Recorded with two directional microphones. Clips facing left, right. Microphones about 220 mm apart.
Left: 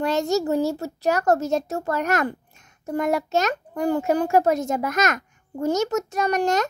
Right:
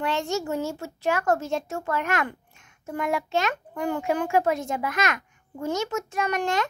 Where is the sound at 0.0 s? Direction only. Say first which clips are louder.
Left 5 dB; 40° left (ahead or behind).